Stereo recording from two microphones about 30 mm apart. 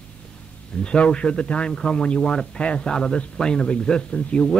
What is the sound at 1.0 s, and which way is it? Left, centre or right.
Speech, left.